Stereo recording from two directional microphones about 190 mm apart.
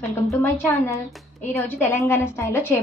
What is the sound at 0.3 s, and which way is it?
Speech, 15° left (ahead or behind).